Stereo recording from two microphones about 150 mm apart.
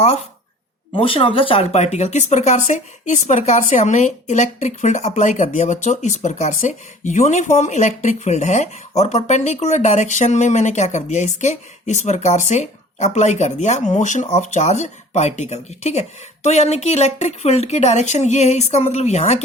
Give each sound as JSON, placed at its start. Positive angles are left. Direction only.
{"t": 0.9, "sound": "speech", "side_deg": 35}